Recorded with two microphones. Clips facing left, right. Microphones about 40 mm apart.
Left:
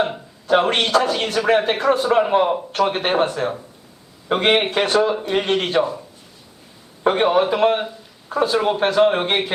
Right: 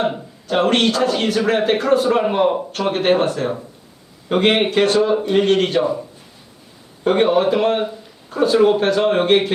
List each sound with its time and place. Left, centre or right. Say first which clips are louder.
0.4 s speech: right 1 dB; centre
7.1 s speech: right 2 dB; centre